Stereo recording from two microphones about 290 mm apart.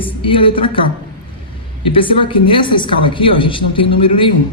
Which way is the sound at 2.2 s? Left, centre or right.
Centre.